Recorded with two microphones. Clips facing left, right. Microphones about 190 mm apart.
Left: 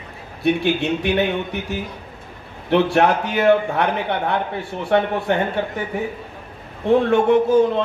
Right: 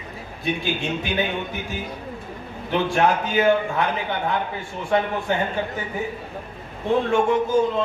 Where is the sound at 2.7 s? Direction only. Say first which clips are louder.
Left 4 dB; 70° left (ahead or behind).